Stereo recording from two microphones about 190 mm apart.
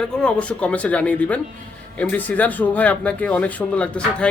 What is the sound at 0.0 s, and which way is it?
Speech, 5° left (ahead or behind).